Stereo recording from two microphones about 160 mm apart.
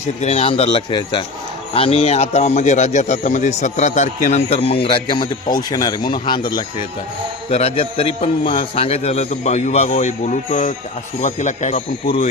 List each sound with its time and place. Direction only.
0.2 s a man's voice: 40° left (ahead or behind)